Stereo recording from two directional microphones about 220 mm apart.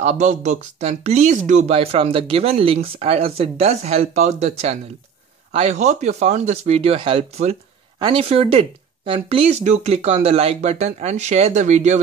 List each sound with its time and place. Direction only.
0.0 s speech: 30° right (ahead or behind)